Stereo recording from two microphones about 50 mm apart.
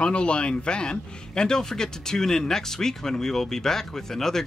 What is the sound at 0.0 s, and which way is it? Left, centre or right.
A man's voice, left.